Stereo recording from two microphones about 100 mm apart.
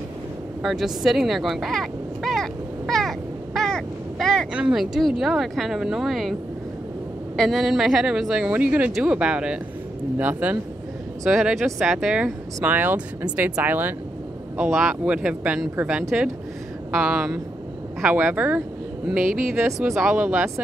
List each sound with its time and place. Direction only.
0.6 s vehicle: 5° right (ahead or behind)
4.6 s speech: 5° right (ahead or behind)
7.3 s speech: centre (ahead or behind); by 10.6 s 15° right (ahead or behind)
11.2 s speech: 5° right (ahead or behind)
12.6 s speech: 15° right (ahead or behind)
14.7 s speech: centre (ahead or behind)
15.0 s speech: 10° right (ahead or behind)